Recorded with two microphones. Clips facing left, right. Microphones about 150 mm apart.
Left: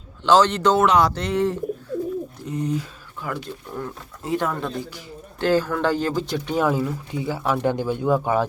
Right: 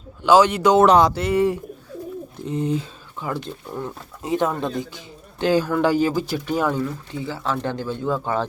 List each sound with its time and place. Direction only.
0.2 s speech: 10° right (ahead or behind)
0.8 s speech: 30° right (ahead or behind)
1.1 s speech: 10° right (ahead or behind)
2.5 s speech: 25° right (ahead or behind); by 8.4 s 15° left (ahead or behind)